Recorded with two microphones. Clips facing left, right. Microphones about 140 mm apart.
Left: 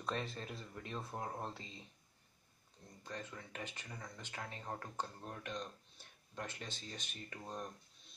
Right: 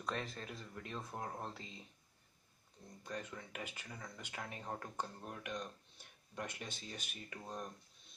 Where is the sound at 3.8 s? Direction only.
Centre (ahead or behind).